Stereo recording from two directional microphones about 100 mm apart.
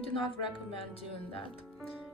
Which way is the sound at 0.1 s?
60° left (ahead or behind).